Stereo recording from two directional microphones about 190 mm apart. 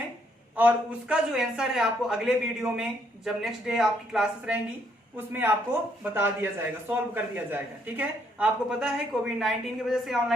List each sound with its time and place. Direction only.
0.5 s a man's voice: 10° right (ahead or behind)